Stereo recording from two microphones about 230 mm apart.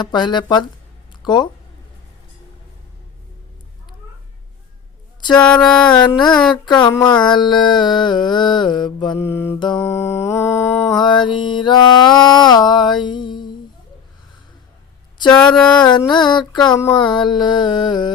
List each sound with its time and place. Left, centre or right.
0.0 s mantra: centre
1.2 s speech: centre
5.5 s a sound: centre
6.7 s mantra: centre
15.4 s a sound: centre
15.8 s mantra: centre